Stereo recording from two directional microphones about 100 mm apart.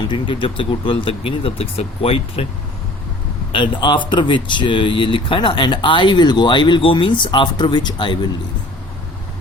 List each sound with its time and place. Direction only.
0.0 s speech: 55° left (ahead or behind); by 2.5 s 75° left (ahead or behind)
3.5 s speech: 50° left (ahead or behind)